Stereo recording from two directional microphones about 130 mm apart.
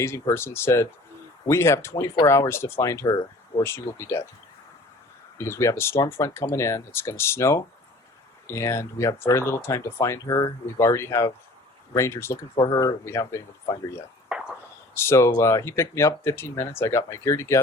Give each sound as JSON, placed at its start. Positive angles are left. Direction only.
{"t": 0.0, "sound": "speech", "side_deg": 20}
{"t": 5.4, "sound": "speech", "side_deg": 20}
{"t": 14.3, "sound": "a sound", "side_deg": -5}
{"t": 14.9, "sound": "speech", "side_deg": 20}